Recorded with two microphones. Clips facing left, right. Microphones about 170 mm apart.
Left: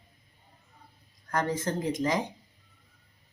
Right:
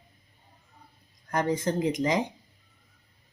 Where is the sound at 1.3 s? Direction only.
15° right (ahead or behind).